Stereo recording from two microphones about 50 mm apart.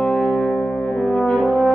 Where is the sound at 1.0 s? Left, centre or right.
Centre.